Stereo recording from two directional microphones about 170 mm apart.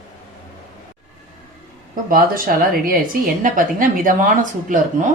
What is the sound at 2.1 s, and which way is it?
Speech, 60° right (ahead or behind).